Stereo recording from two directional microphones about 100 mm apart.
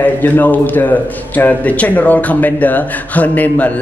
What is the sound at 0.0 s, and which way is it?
A man's voice, 20° left (ahead or behind).